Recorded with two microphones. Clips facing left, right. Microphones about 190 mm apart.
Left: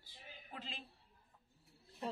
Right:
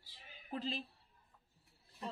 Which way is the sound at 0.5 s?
35° right (ahead or behind).